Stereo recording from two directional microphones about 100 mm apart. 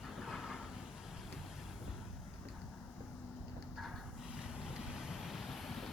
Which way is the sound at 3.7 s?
Centre (ahead or behind).